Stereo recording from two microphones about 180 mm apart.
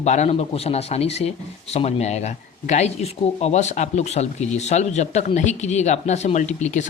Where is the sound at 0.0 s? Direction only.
40° left (ahead or behind).